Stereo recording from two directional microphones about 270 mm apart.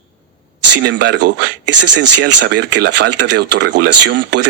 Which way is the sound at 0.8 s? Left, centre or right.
Right.